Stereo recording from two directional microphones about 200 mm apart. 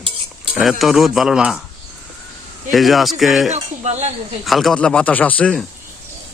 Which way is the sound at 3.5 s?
35° right (ahead or behind).